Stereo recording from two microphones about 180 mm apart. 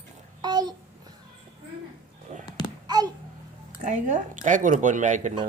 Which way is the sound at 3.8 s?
40° right (ahead or behind).